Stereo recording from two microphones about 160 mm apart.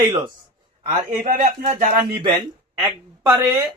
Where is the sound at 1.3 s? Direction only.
55° right (ahead or behind).